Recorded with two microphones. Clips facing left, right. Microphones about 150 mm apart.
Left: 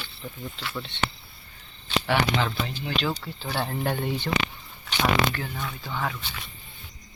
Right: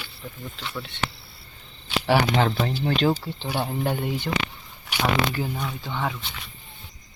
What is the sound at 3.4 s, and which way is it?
Speech, 10° right (ahead or behind).